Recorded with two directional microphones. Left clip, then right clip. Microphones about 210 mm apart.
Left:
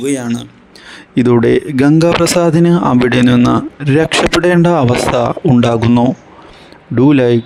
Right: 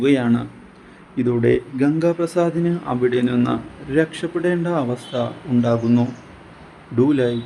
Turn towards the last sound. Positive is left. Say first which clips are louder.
# left 8 dB
turn(degrees=45)  # may be behind; listen again after turning